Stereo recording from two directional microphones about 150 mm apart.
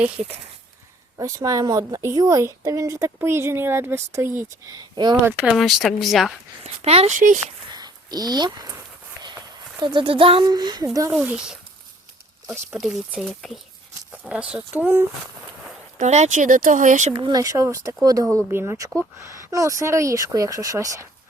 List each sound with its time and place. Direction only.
1.2 s a woman's voice: 20° right (ahead or behind)
5.2 s speech: 15° right (ahead or behind)
5.5 s speech: centre (ahead or behind)
6.8 s speech: 45° right (ahead or behind)
7.7 s a sound: 25° right (ahead or behind)
9.8 s a woman's voice: 35° right (ahead or behind)
11.1 s speech: 5° right (ahead or behind)
12.8 s speech: centre (ahead or behind)
16.0 s speech: 50° right (ahead or behind)
17.2 s a woman's voice: 25° right (ahead or behind)